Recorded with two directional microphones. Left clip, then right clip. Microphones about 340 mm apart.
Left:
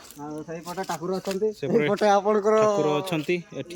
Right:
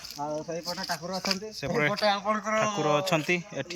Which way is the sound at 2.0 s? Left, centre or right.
Left.